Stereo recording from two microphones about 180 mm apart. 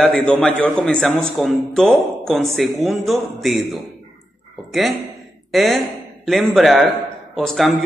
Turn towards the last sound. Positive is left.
turn(degrees=0)  # may be behind; listen again after turning